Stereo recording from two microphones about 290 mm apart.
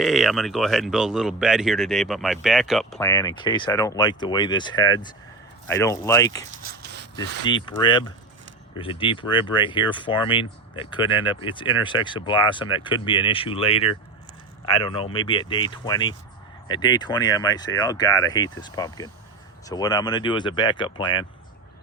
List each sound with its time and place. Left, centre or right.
0.0 s speech: centre
3.1 s speech: centre
6.7 s dog: right
7.2 s speech: centre